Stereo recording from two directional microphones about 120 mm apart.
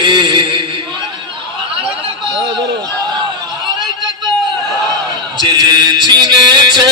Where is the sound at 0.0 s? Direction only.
40° right (ahead or behind).